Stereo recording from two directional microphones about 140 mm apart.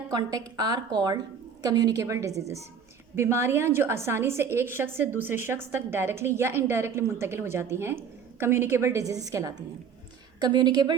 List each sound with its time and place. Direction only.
0.1 s a woman's voice: 25° right (ahead or behind)